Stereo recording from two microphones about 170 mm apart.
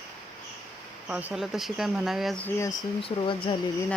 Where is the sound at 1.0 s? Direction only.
5° right (ahead or behind).